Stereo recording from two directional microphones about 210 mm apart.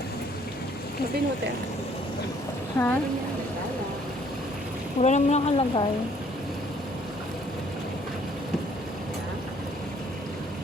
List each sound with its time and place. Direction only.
2.8 s speech: 10° left (ahead or behind)
4.9 s speech: 30° left (ahead or behind)